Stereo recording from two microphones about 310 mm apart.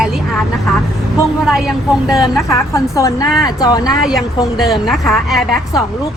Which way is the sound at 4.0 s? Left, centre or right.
Centre.